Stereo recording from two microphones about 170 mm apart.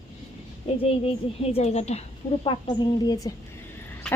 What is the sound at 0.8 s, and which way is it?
A woman's voice, 35° left (ahead or behind).